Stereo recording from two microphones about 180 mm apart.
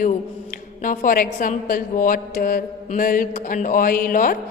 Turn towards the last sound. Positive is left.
turn(degrees=50)  # may be behind; listen again after turning